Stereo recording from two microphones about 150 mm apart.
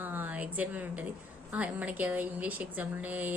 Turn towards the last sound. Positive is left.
turn(degrees=-10)  # may be behind; listen again after turning